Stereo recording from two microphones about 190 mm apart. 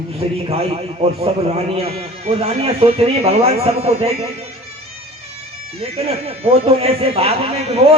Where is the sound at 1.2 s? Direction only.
30° right (ahead or behind).